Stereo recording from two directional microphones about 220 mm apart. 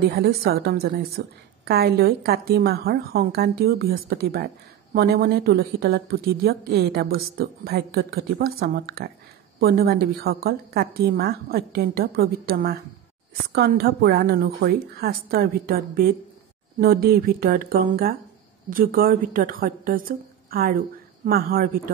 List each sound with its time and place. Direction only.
0.1 s a woman's voice: 45° right (ahead or behind)